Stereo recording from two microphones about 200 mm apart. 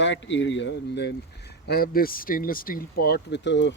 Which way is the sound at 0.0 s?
65° left (ahead or behind).